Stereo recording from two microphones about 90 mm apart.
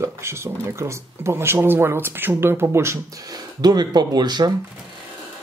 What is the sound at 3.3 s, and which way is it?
Speech, 45° right (ahead or behind).